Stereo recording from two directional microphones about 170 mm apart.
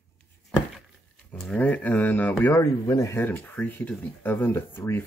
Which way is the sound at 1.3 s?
10° left (ahead or behind).